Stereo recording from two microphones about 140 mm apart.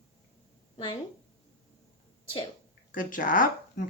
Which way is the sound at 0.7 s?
35° left (ahead or behind).